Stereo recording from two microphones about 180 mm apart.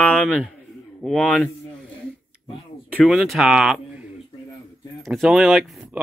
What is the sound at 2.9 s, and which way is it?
Speech, centre (ahead or behind).